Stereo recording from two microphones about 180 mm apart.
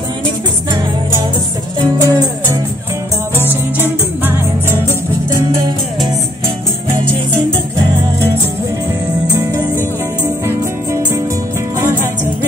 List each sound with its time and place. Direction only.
1.8 s music: 20° right (ahead or behind)
3.8 s music: 10° right (ahead or behind)